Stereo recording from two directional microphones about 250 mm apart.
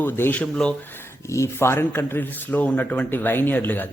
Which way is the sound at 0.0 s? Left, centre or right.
Centre.